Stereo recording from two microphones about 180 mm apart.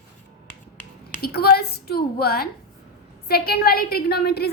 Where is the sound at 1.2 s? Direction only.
60° left (ahead or behind).